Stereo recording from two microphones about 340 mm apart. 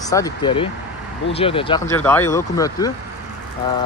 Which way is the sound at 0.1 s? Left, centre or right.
Centre.